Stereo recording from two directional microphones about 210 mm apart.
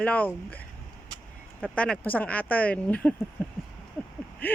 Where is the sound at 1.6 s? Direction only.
5° left (ahead or behind).